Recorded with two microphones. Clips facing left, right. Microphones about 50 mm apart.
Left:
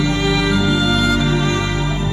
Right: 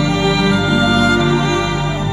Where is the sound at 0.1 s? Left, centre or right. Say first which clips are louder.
Right 2 dB; right.